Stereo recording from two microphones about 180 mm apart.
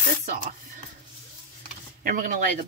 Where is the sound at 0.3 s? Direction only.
45° right (ahead or behind).